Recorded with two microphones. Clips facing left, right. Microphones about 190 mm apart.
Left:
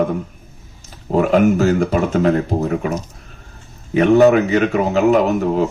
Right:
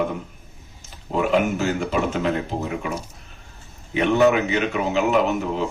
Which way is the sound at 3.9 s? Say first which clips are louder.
Left 6 dB; 40° left (ahead or behind).